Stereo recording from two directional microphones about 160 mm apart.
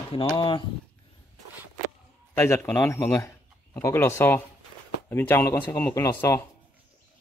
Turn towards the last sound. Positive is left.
turn(degrees=15)  # may be behind; listen again after turning